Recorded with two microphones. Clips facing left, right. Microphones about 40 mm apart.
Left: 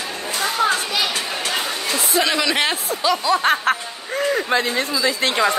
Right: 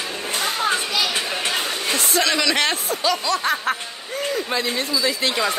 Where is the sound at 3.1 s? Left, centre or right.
Centre.